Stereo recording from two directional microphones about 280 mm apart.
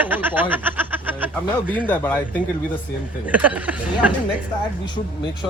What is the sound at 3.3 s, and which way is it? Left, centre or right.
Speech, centre.